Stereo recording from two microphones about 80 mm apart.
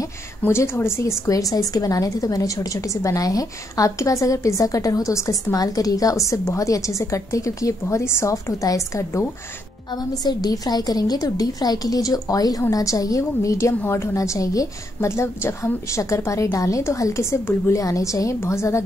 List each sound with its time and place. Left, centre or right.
0.0 s a woman's voice: left
9.8 s a woman's voice: left